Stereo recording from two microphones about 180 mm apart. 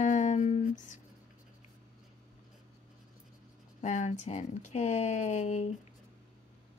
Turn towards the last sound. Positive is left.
turn(degrees=40)  # may be behind; listen again after turning